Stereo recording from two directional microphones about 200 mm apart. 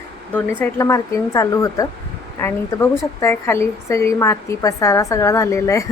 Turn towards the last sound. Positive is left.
turn(degrees=15)  # may be behind; listen again after turning